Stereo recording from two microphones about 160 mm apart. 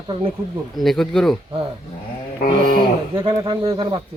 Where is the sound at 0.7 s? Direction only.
Centre (ahead or behind).